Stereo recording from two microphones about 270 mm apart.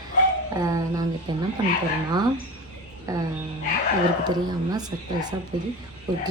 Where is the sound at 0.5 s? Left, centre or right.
Centre.